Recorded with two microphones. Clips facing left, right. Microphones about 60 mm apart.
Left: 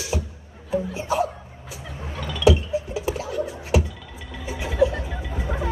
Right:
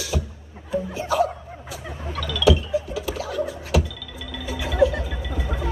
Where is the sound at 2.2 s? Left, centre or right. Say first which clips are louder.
Even; left.